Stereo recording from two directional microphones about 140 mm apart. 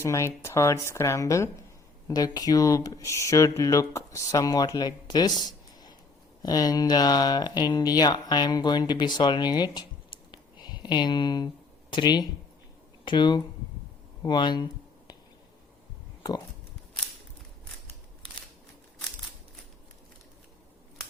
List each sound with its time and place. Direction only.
0.0 s speech: 20° left (ahead or behind)